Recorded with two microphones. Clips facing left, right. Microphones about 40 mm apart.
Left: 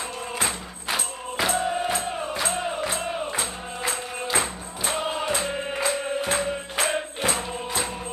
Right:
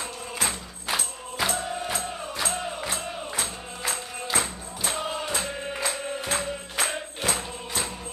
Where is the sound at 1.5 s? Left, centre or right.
Left.